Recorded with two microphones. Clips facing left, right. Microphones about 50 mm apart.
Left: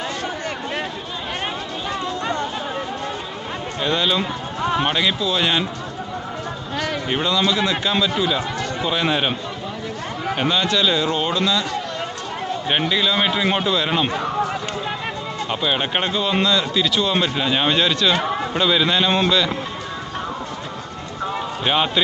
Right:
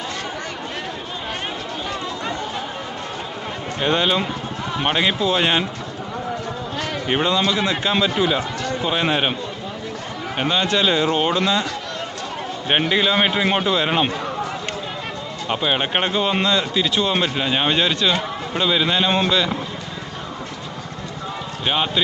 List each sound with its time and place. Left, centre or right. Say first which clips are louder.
3.8 s speech: right 1 dB; right
7.1 s speech: right 3 dB; centre
7.4 s speech: even; centre
10.3 s speech: even; centre
10.7 s speech: right 1 dB; right
12.8 s speech: right 2 dB; right
15.4 s speech: right 2 dB; centre
21.6 s speech: left 1 dB; centre